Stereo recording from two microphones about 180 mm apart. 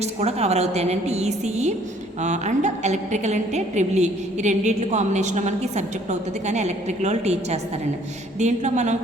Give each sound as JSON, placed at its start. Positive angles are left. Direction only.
{"t": 0.0, "sound": "a woman's voice", "side_deg": -35}